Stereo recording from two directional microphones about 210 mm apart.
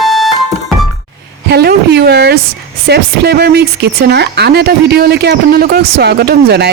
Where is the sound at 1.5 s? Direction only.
50° right (ahead or behind).